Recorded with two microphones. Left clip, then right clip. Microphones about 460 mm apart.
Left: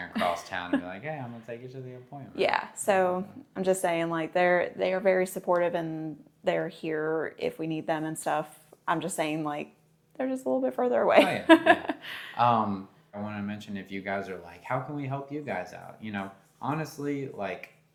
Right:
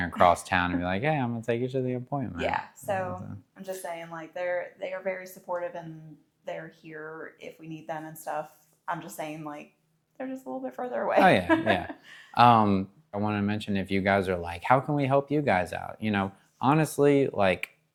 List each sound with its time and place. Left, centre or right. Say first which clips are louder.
0.5 s speech: right 5 dB; right
2.5 s a woman's voice: left 4 dB; left
12.4 s speech: right 5 dB; right